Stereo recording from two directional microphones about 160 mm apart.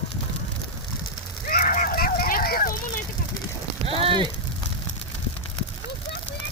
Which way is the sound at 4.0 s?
35° right (ahead or behind).